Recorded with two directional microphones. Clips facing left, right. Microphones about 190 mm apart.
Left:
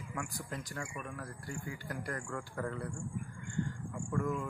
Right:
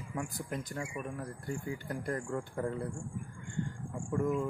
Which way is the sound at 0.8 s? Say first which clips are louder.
Right 4 dB; 20° right (ahead or behind).